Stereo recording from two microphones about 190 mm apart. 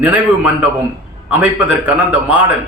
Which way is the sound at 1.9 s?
5° right (ahead or behind).